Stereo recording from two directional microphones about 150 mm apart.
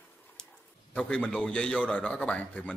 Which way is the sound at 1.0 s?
5° left (ahead or behind).